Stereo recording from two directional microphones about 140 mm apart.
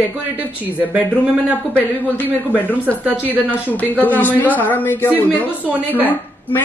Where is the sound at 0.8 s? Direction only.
10° right (ahead or behind).